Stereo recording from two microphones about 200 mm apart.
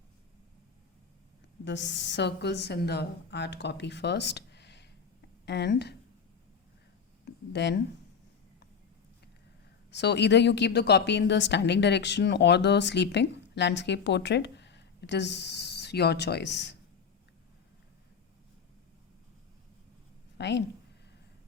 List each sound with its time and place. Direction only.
1.6 s a woman's voice: 65° left (ahead or behind)
7.3 s a sound: 60° left (ahead or behind)
9.9 s a woman's voice: 60° left (ahead or behind)
20.4 s a woman's voice: 60° left (ahead or behind)